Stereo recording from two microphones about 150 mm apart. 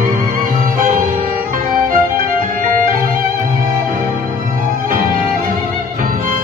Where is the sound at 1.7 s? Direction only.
65° right (ahead or behind).